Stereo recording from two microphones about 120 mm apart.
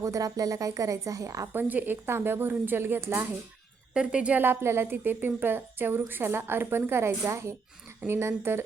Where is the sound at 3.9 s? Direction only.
10° right (ahead or behind).